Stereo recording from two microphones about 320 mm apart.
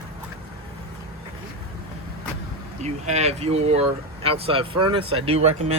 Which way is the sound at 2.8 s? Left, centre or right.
Right.